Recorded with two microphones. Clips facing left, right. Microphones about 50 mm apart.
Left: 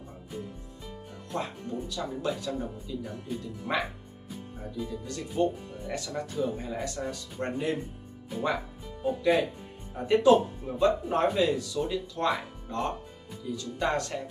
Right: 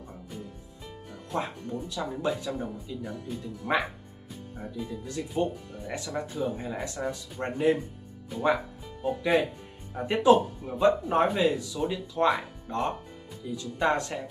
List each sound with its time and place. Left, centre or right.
1.3 s speech: centre